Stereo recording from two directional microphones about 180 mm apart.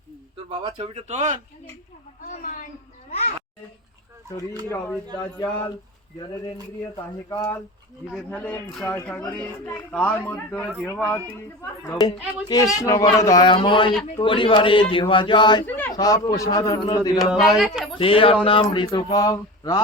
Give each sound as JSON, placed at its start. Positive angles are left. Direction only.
{"t": 0.6, "sound": "speech", "side_deg": -30}
{"t": 2.2, "sound": "a sound", "side_deg": 45}
{"t": 5.1, "sound": "speech", "side_deg": 25}
{"t": 6.9, "sound": "speech", "side_deg": 20}
{"t": 8.1, "sound": "speech", "side_deg": 5}
{"t": 11.9, "sound": "speech", "side_deg": 25}
{"t": 15.6, "sound": "speech", "side_deg": 10}
{"t": 16.0, "sound": "speech", "side_deg": 20}
{"t": 17.2, "sound": "speech", "side_deg": 0}
{"t": 17.9, "sound": "speech", "side_deg": 30}